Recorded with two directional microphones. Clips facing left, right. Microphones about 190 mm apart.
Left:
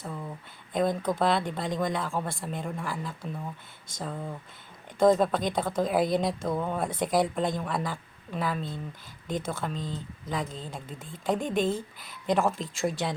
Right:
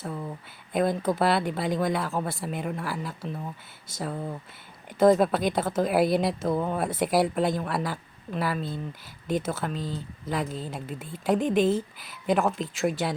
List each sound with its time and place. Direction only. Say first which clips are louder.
0.0 s speech: right 3 dB; 5° right (ahead or behind)